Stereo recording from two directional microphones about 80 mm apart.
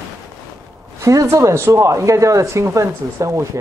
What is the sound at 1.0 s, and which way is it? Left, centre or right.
Speech, right.